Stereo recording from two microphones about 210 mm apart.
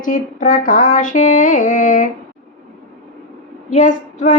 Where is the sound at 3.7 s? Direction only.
35° left (ahead or behind).